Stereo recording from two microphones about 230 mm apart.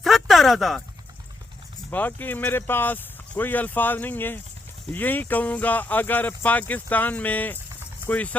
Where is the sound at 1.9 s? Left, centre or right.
Centre.